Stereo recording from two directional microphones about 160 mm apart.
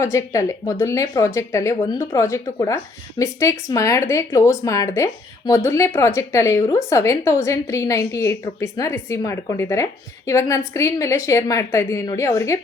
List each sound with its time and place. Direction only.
0.0 s a woman's voice: 20° left (ahead or behind)